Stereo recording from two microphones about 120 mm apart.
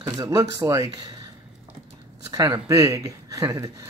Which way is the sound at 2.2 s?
35° right (ahead or behind).